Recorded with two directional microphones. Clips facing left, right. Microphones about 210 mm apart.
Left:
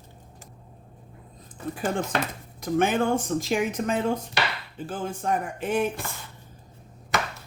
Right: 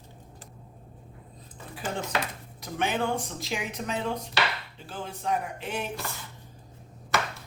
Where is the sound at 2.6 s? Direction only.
45° left (ahead or behind).